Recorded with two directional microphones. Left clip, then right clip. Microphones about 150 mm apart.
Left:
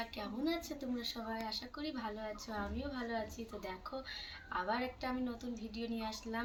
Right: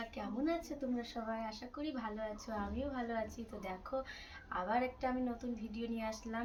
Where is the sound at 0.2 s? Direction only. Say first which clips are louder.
Right 2 dB; 15° right (ahead or behind).